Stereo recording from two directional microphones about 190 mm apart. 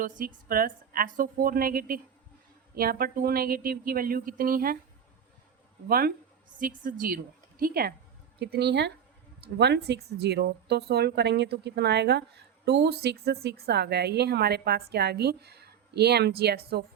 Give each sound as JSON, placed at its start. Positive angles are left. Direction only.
{"t": 0.2, "sound": "speech", "side_deg": -45}
{"t": 5.9, "sound": "speech", "side_deg": -50}